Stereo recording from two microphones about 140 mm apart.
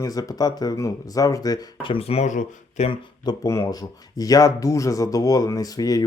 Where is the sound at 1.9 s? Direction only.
45° left (ahead or behind).